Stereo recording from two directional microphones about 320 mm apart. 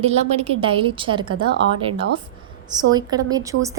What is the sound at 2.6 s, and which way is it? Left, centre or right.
A woman's voice, centre.